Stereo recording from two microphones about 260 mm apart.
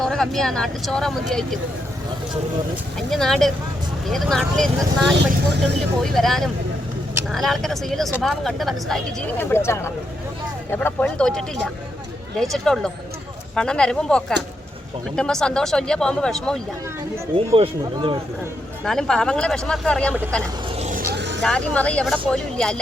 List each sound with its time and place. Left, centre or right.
0.0 s speech: centre
3.1 s speech: centre
17.3 s speech: right
18.9 s speech: centre
20.7 s a sound: right
21.1 s vehicle: right
21.4 s speech: centre